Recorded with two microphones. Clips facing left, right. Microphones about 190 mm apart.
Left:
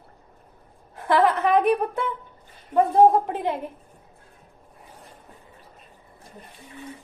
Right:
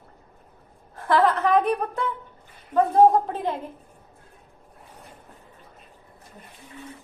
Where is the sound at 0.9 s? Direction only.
15° left (ahead or behind).